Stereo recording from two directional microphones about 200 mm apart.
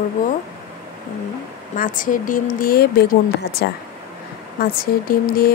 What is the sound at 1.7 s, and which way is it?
Speech, 40° left (ahead or behind).